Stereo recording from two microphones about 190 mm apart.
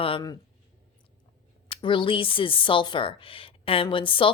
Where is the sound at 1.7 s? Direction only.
25° left (ahead or behind).